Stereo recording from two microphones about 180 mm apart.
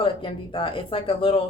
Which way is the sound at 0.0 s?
30° left (ahead or behind).